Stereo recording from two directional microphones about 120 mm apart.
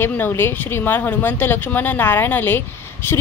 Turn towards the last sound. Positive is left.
turn(degrees=15)  # may be behind; listen again after turning